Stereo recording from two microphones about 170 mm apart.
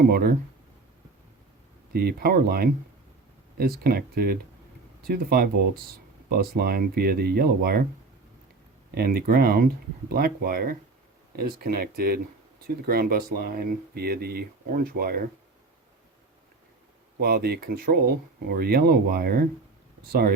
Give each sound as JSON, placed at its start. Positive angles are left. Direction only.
{"t": 0.1, "sound": "speech", "side_deg": -60}
{"t": 1.9, "sound": "speech", "side_deg": -65}
{"t": 9.0, "sound": "speech", "side_deg": -60}
{"t": 17.2, "sound": "speech", "side_deg": -65}